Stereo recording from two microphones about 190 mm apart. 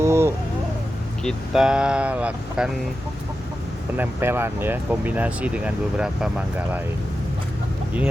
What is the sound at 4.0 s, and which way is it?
Speech, 10° right (ahead or behind).